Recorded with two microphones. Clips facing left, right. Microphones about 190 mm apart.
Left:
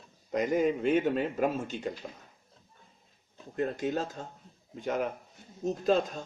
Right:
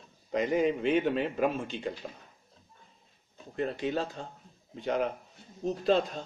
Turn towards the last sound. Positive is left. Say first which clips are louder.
# even
turn(degrees=45)  # may be behind; listen again after turning